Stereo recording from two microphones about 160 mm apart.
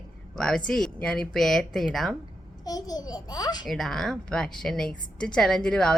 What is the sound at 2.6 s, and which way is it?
A child's voice, 25° left (ahead or behind).